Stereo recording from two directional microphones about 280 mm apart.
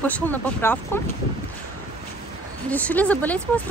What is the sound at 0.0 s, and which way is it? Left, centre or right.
Speech, centre.